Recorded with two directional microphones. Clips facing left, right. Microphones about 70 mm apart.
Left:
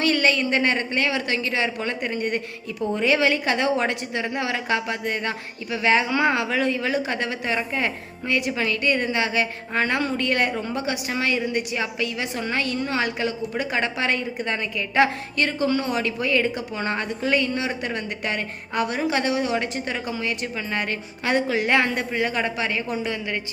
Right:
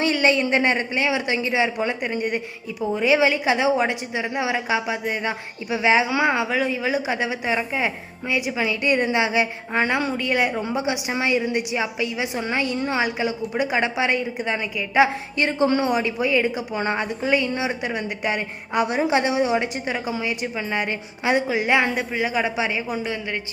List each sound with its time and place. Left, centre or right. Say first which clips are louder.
0.0 s a woman's voice: right 1 dB; centre
9.9 s a woman's voice: right 1 dB; centre
15.4 s a woman's voice: right 4 dB; right